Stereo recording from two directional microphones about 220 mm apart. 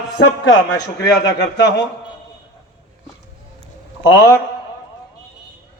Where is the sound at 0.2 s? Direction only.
50° left (ahead or behind).